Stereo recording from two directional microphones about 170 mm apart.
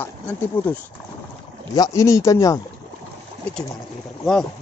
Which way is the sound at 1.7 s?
20° left (ahead or behind).